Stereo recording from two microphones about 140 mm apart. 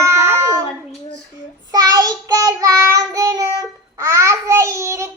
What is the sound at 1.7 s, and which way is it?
Child singing, 30° right (ahead or behind).